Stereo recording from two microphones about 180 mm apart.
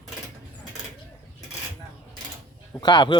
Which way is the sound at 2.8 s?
25° left (ahead or behind).